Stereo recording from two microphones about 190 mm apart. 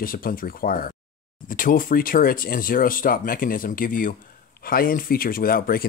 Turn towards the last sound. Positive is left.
turn(degrees=50)  # may be behind; listen again after turning